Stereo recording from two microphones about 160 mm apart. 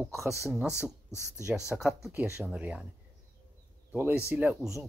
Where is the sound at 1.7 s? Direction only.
5° right (ahead or behind).